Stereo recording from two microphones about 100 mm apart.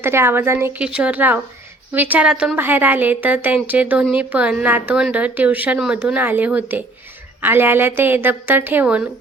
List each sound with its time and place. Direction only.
0.0 s a woman's voice: 25° right (ahead or behind)
0.8 s speech: 10° right (ahead or behind)
2.6 s a woman's voice: 20° right (ahead or behind)